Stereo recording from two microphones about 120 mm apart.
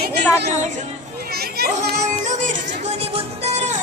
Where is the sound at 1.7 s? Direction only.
90° right.